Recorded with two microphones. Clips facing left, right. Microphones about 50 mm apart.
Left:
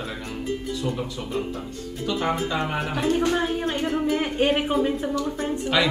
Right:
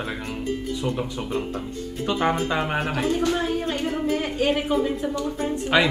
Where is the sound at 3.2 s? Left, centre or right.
Centre.